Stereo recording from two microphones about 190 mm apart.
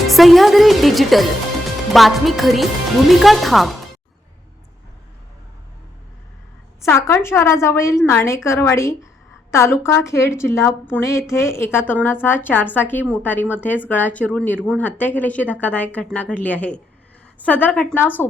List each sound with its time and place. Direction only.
0.1 s speech: centre (ahead or behind)
6.8 s speech: 15° left (ahead or behind)